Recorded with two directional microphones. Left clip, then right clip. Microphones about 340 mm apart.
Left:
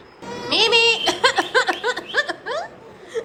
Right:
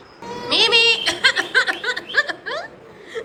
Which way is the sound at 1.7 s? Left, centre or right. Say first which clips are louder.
Right 1 dB; centre.